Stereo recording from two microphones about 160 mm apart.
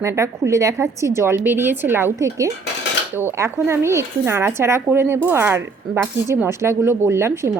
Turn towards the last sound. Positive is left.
turn(degrees=-15)  # may be behind; listen again after turning